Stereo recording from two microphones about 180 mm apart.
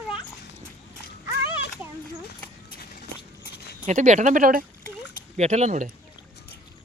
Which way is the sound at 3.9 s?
40° right (ahead or behind).